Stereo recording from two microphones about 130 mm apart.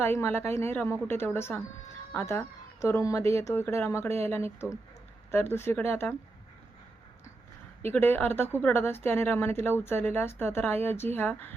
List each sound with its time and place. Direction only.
0.0 s speech: 20° left (ahead or behind)
7.9 s speech: 15° left (ahead or behind)